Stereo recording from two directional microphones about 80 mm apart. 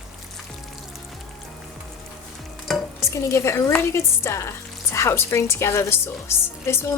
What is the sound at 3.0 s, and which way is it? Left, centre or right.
Speech, left.